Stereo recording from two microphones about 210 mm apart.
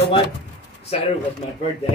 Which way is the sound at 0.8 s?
30° left (ahead or behind).